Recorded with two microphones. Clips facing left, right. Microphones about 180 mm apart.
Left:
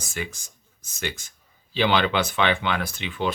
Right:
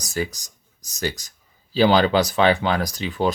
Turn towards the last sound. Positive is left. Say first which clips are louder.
# right 5 dB
turn(degrees=-40)  # may be behind; listen again after turning